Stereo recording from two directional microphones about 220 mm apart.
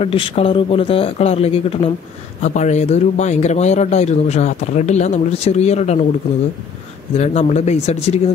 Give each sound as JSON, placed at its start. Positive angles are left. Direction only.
{"t": 0.0, "sound": "speech", "side_deg": 25}
{"t": 7.2, "sound": "speech", "side_deg": 30}